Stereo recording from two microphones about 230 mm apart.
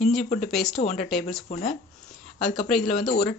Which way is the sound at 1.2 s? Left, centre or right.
Centre.